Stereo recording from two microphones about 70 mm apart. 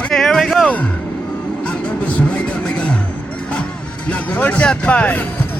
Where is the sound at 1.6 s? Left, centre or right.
Centre.